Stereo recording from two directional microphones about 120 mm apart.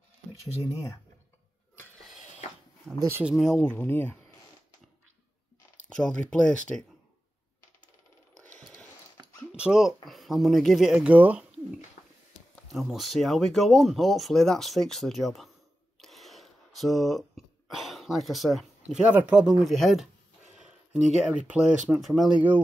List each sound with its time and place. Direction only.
0.3 s speech: 30° left (ahead or behind)
2.9 s speech: 20° right (ahead or behind)
3.3 s speech: centre (ahead or behind)
3.6 s speech: 15° left (ahead or behind)
5.9 s speech: 5° left (ahead or behind)
8.5 s a sound: 5° left (ahead or behind)
9.5 s speech: 5° right (ahead or behind)
12.7 s speech: centre (ahead or behind)
16.0 s a sound: centre (ahead or behind)
17.6 s speech: centre (ahead or behind)
21.2 s speech: 5° right (ahead or behind)